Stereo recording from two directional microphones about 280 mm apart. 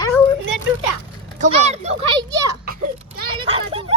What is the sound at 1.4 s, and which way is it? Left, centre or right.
A child's voice, right.